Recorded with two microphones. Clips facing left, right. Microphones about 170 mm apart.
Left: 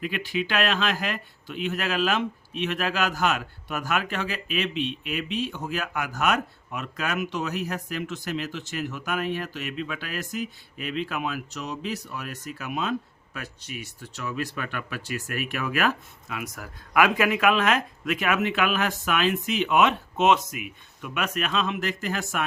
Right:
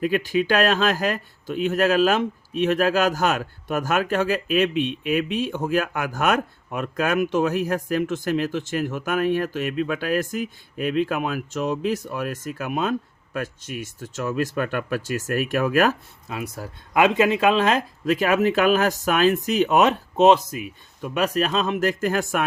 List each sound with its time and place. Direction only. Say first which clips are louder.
0.0 s speech: right 8 dB; 45° right (ahead or behind)
16.4 s speech: right 5 dB; 30° right (ahead or behind); by 22.4 s 50° right (ahead or behind)